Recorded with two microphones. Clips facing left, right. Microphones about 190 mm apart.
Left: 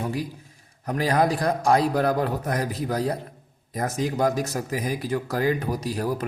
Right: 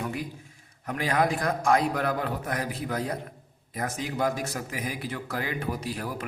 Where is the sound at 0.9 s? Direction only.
35° left (ahead or behind).